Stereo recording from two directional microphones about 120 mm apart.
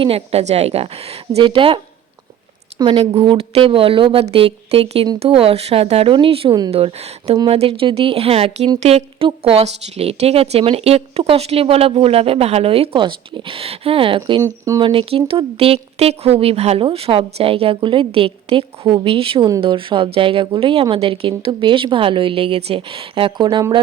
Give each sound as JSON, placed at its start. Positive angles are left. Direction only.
{"t": 0.0, "sound": "a woman's voice", "side_deg": -55}
{"t": 14.4, "sound": "speech", "side_deg": -25}
{"t": 14.8, "sound": "speech", "side_deg": -45}